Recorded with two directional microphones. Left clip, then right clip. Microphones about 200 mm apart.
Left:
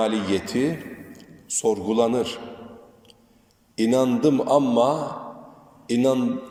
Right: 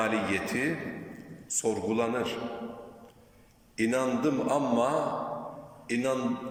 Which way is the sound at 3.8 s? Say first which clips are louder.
Left 7 dB; 25° left (ahead or behind).